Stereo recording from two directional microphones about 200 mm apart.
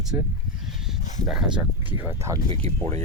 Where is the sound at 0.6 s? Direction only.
Centre (ahead or behind).